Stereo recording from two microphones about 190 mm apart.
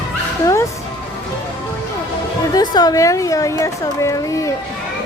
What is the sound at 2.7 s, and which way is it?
A child's voice, 20° left (ahead or behind).